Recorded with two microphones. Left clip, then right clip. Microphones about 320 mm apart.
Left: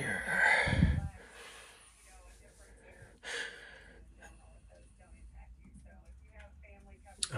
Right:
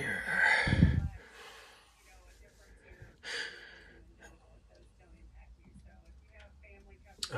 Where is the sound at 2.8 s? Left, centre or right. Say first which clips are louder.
Right 1 dB; centre.